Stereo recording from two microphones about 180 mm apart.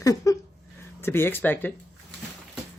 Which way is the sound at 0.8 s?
15° left (ahead or behind).